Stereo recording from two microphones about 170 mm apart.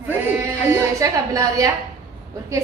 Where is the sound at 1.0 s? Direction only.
20° right (ahead or behind).